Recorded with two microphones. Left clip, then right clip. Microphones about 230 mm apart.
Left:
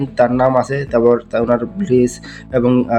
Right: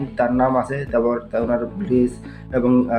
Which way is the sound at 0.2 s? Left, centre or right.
Left.